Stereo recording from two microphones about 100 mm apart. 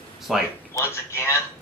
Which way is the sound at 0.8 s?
25° left (ahead or behind).